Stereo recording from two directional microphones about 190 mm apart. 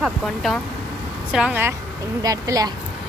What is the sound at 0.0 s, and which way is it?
A woman's voice, centre (ahead or behind).